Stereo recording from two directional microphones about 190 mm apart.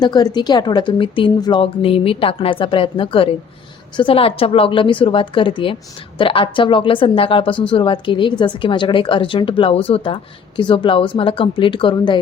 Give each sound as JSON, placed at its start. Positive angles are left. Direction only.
{"t": 0.0, "sound": "a woman's voice", "side_deg": 20}